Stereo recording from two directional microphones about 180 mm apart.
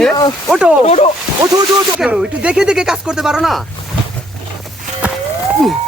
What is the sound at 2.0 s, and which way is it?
Speech, 5° right (ahead or behind).